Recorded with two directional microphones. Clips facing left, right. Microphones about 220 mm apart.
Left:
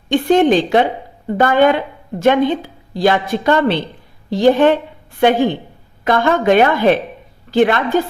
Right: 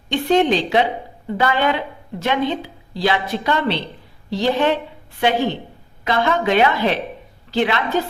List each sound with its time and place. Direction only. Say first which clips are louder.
0.1 s speech: left 5 dB; 50° left (ahead or behind)